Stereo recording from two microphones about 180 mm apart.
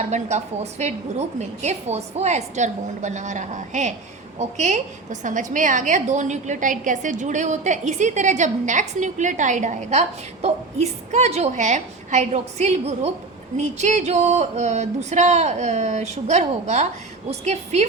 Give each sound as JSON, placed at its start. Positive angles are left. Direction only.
{"t": 0.0, "sound": "a woman's voice", "side_deg": -40}